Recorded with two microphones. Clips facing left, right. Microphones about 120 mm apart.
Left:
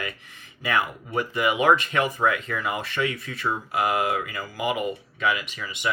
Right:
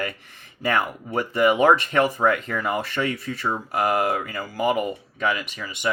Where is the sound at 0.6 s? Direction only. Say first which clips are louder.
Right 2 dB; 45° right (ahead or behind).